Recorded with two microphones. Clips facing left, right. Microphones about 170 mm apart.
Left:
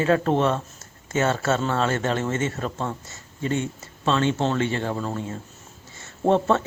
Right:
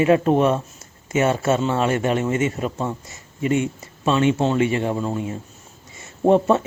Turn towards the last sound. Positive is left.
turn(degrees=-10)  # may be behind; listen again after turning